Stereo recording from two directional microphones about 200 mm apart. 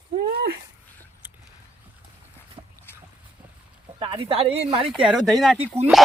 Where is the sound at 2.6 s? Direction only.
25° right (ahead or behind).